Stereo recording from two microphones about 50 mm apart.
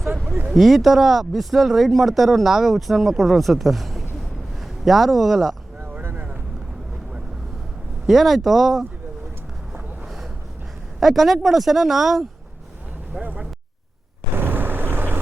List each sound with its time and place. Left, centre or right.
0.5 s a man's voice: centre
5.8 s a sound: right
8.0 s speech: centre
11.0 s speech: centre
13.2 s speech: centre
14.3 s vehicle: right